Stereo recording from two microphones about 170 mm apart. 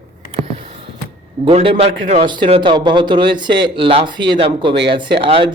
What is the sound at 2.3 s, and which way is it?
A man's voice, 30° right (ahead or behind).